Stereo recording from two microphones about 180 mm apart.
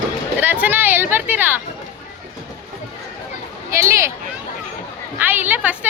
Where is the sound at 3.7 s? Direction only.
15° right (ahead or behind).